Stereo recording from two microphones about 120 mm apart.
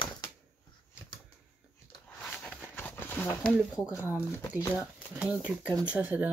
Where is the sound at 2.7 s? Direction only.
20° left (ahead or behind).